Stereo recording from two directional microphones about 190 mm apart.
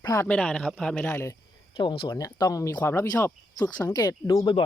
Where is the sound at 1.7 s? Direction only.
25° left (ahead or behind).